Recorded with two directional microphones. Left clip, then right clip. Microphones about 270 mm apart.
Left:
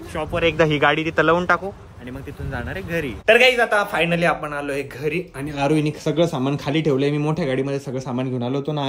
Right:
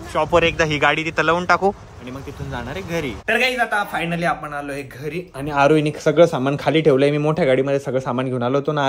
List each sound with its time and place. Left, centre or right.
0.1 s a man's voice: right
0.5 s a man's voice: centre